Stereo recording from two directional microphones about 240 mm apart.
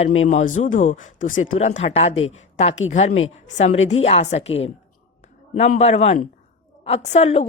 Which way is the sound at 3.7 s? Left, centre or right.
Left.